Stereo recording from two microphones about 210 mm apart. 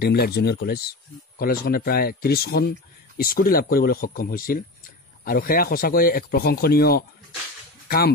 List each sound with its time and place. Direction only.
0.0 s speech: 50° left (ahead or behind)